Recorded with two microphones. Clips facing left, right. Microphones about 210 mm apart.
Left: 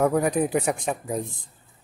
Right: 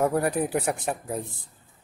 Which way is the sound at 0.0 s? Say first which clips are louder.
Left 2 dB; 5° right (ahead or behind).